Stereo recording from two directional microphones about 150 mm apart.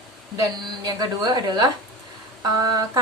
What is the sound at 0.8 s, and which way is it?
A woman's voice, 25° right (ahead or behind).